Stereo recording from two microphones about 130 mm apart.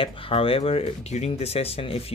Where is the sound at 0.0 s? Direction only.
45° left (ahead or behind).